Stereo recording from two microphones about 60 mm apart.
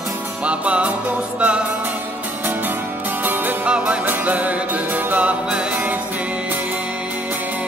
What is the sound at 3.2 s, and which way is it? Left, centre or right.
Music, right.